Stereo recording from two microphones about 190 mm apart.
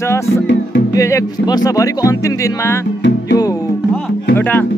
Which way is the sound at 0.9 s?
15° left (ahead or behind).